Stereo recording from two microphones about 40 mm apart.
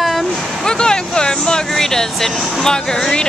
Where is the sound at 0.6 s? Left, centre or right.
Centre.